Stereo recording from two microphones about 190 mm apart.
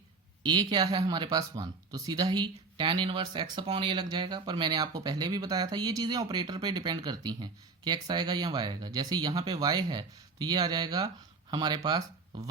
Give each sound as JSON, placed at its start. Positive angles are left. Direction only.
{"t": 0.4, "sound": "speech", "side_deg": -25}